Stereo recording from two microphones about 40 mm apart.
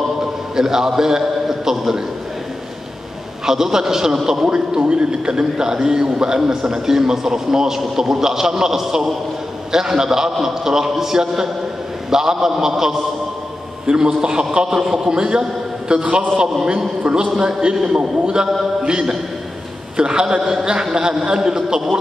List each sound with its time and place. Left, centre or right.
0.2 s a man's voice: centre
3.4 s a man's voice: centre
4.5 s a man's voice: right
17.5 s a man's voice: centre